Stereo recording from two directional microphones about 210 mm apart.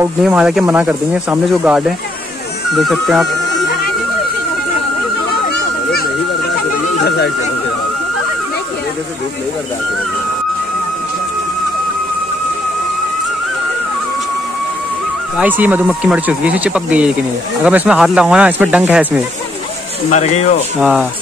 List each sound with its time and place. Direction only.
0.0 s speech: 5° right (ahead or behind)
15.3 s speech: 10° right (ahead or behind)
20.1 s speech: 35° left (ahead or behind)
20.8 s speech: 5° right (ahead or behind)